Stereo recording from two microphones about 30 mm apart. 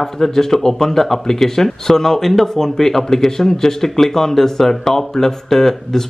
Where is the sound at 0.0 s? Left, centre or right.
Centre.